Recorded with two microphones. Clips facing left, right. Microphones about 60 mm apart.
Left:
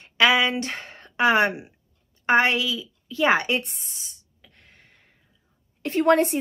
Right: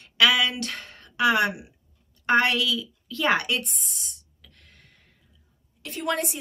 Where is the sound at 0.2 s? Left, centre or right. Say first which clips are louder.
Left 2 dB; left.